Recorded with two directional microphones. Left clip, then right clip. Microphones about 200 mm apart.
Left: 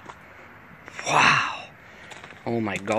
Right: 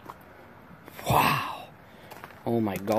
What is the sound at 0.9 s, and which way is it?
Groan, 10° right (ahead or behind).